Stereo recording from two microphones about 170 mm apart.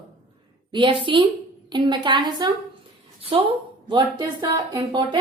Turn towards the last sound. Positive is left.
turn(degrees=-25)  # may be behind; listen again after turning